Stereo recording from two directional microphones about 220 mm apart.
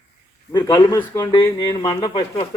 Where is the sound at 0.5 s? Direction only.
15° left (ahead or behind).